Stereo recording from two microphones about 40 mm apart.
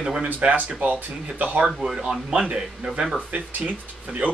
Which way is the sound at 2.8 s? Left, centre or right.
Right.